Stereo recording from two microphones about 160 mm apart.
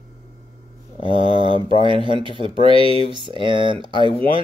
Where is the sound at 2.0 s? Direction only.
30° right (ahead or behind).